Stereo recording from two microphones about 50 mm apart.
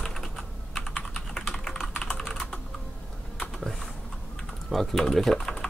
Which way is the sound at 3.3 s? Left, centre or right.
Centre.